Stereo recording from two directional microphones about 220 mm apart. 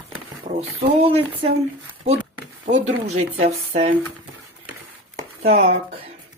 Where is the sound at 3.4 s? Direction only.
30° right (ahead or behind).